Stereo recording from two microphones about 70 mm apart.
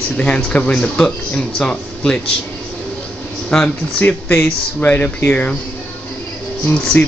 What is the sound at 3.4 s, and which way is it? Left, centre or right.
Speech, centre.